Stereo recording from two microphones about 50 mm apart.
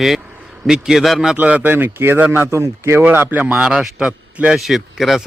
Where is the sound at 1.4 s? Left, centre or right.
Right.